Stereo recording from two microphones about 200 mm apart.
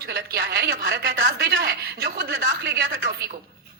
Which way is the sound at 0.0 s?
55° right (ahead or behind).